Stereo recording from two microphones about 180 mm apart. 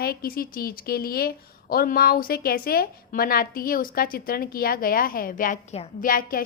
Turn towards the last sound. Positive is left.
turn(degrees=50)  # may be behind; listen again after turning